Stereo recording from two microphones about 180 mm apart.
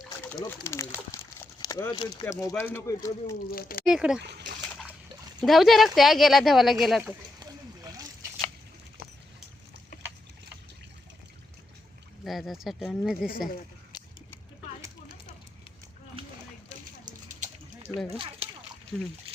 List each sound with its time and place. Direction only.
0.3 s speech: 10° left (ahead or behind)
3.5 s speech: 55° left (ahead or behind)
3.8 s speech: 5° right (ahead or behind)
4.2 s speech: 65° right (ahead or behind)
5.4 s speech: centre (ahead or behind)
12.2 s speech: centre (ahead or behind)
13.9 s a sound: 25° left (ahead or behind)
17.1 s a sound: 45° right (ahead or behind)
18.9 s speech: 5° left (ahead or behind)